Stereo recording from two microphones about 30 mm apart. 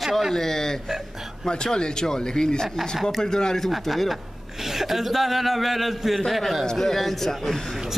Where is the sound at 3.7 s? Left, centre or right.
Centre.